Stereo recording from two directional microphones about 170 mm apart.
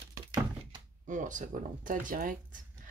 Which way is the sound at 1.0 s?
50° right (ahead or behind).